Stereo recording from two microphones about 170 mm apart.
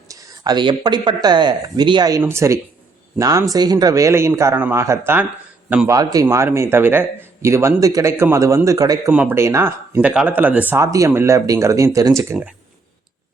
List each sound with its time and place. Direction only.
0.1 s a man's voice: 25° right (ahead or behind); by 5.9 s 5° right (ahead or behind)
5.9 s speech: 20° right (ahead or behind)